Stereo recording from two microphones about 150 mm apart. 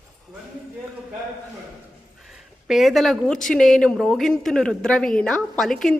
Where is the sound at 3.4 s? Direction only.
5° left (ahead or behind).